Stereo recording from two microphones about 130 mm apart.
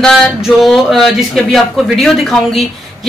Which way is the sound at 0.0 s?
Centre (ahead or behind).